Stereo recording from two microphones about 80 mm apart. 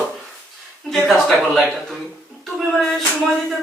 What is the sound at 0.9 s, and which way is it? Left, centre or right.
Speech, centre.